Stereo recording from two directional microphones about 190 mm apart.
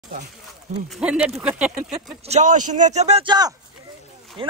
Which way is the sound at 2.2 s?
40° right (ahead or behind).